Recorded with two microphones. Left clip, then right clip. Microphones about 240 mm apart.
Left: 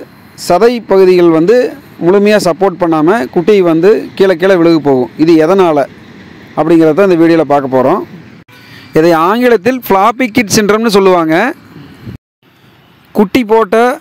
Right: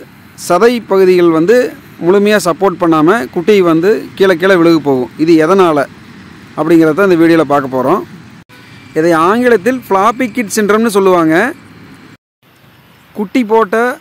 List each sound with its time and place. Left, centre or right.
0.4 s speech: centre
8.9 s speech: left
13.1 s speech: left